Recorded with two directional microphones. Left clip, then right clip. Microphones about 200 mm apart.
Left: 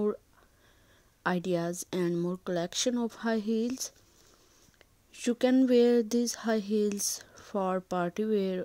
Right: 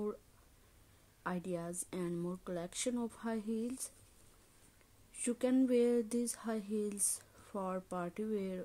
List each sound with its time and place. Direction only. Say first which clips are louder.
1.2 s speech: left 11 dB; 40° left (ahead or behind)
5.2 s speech: left 8 dB; 35° left (ahead or behind)